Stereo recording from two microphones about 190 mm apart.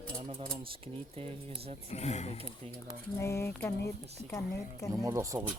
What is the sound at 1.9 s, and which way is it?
Speech, 35° left (ahead or behind).